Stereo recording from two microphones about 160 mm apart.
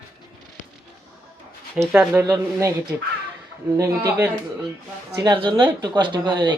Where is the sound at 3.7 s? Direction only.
20° right (ahead or behind).